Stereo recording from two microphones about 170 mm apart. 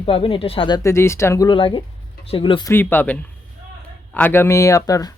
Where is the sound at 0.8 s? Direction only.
15° left (ahead or behind).